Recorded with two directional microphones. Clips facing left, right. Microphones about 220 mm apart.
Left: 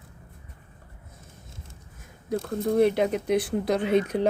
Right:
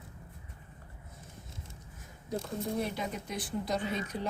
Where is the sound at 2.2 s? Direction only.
55° left (ahead or behind).